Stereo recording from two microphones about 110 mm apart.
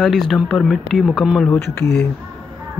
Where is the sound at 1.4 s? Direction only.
20° left (ahead or behind).